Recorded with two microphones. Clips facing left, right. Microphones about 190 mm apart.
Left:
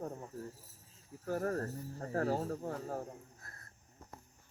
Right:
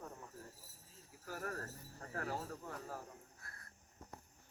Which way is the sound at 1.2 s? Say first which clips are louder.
Left 10 dB; 30° left (ahead or behind).